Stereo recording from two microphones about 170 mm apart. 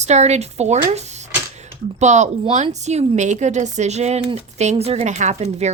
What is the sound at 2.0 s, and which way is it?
Speech, 45° right (ahead or behind).